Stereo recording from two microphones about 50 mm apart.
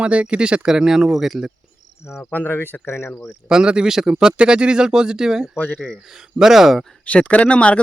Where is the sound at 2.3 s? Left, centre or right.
Left.